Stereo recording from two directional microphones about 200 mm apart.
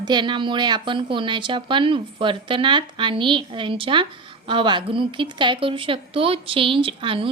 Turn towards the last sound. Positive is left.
turn(degrees=-25)  # may be behind; listen again after turning